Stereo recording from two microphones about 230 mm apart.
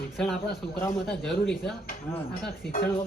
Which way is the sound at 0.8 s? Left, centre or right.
Centre.